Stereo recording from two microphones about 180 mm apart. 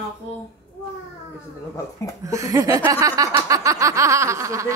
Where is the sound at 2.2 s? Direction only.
20° right (ahead or behind).